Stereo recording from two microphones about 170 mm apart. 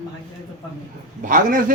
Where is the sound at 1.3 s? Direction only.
50° right (ahead or behind).